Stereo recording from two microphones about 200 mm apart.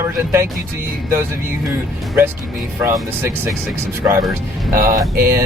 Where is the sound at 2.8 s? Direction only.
15° right (ahead or behind).